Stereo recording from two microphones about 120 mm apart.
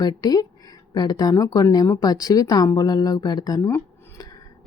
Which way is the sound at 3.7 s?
25° left (ahead or behind).